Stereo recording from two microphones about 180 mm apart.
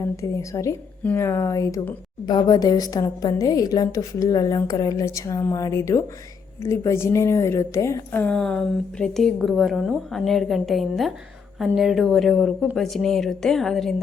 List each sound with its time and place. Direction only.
0.2 s a woman's voice: 15° left (ahead or behind); by 13.9 s centre (ahead or behind)